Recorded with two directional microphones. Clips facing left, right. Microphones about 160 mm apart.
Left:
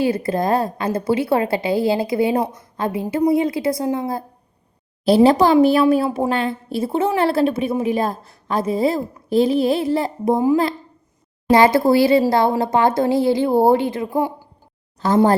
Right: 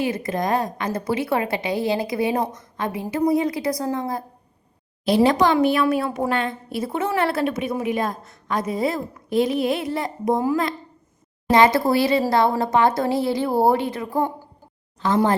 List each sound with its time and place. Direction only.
0.0 s a woman's voice: 30° left (ahead or behind)
11.5 s a woman's voice: 30° left (ahead or behind)
15.0 s a woman's voice: 35° left (ahead or behind)